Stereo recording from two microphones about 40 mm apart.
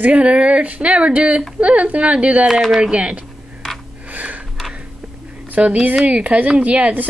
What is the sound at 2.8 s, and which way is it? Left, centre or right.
Speech, right.